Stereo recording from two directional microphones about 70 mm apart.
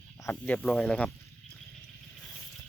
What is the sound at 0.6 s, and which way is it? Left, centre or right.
Speech, centre.